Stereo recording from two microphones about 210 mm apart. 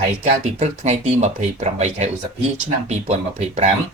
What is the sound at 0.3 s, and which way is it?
Speech, 35° right (ahead or behind).